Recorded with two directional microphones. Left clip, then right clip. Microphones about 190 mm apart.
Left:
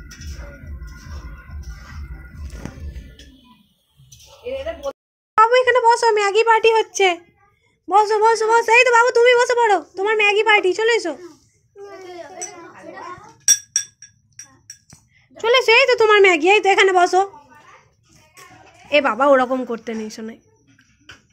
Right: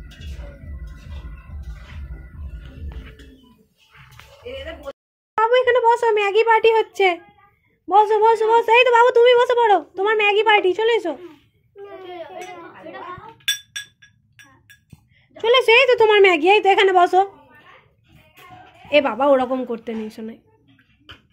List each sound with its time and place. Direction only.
5.3 s a woman's voice: 5° right (ahead or behind)
11.8 s children playing: 25° right (ahead or behind)
15.3 s speech: centre (ahead or behind)
18.9 s speech: 5° left (ahead or behind)